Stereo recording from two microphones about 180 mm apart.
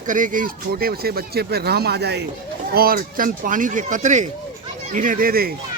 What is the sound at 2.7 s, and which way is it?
A man's voice, 55° right (ahead or behind).